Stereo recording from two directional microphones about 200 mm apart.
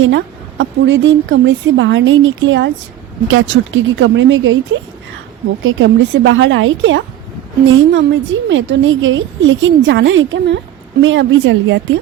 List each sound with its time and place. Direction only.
0.6 s a woman's voice: 70° right (ahead or behind)